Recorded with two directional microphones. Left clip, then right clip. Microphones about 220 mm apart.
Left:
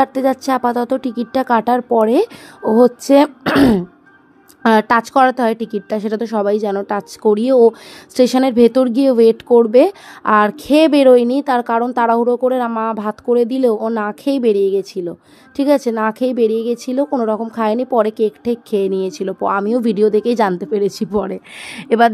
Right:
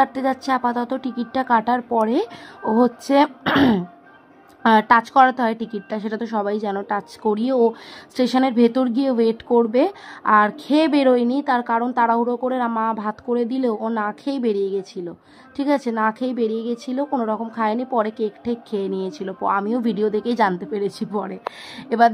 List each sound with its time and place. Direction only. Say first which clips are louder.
0.0 s speech: left 4 dB; 30° left (ahead or behind)